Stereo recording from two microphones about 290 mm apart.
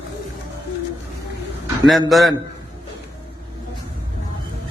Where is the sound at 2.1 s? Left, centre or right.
Centre.